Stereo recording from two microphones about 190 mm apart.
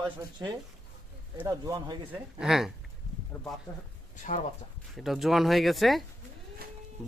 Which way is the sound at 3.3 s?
10° left (ahead or behind).